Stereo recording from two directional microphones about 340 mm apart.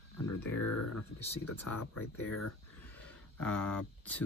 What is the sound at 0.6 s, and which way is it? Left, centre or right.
Speech, left.